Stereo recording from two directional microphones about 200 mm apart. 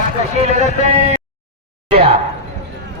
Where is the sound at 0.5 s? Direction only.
35° right (ahead or behind).